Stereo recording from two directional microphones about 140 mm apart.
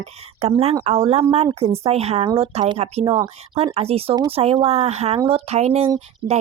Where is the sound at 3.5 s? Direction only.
45° right (ahead or behind).